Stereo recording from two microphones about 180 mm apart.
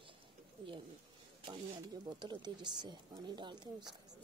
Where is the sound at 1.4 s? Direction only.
25° right (ahead or behind).